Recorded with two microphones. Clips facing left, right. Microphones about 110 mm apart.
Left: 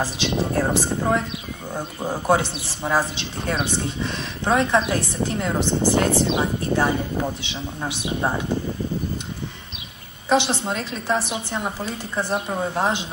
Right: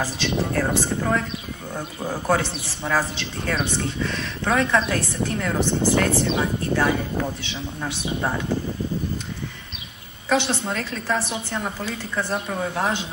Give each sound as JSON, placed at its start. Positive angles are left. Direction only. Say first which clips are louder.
{"t": 0.0, "sound": "a woman's voice", "louder": "left 1 dB", "side_deg": 25}
{"t": 10.3, "sound": "a woman's voice", "louder": "left 2 dB", "side_deg": 25}